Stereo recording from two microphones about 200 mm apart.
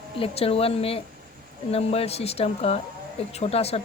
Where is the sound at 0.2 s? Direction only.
30° left (ahead or behind).